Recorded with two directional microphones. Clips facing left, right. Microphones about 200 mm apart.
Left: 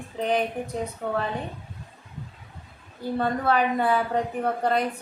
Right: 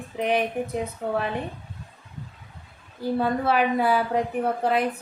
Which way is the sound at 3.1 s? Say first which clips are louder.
Right 1 dB; 5° right (ahead or behind).